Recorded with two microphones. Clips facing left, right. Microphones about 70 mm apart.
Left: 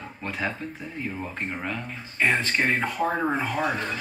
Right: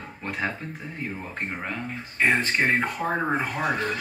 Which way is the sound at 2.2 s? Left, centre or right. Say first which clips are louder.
Right 1 dB; right.